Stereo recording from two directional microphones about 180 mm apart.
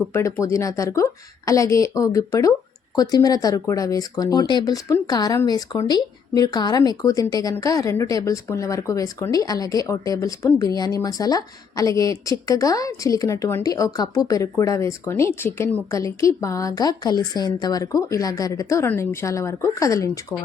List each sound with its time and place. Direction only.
0.1 s speech: 15° left (ahead or behind)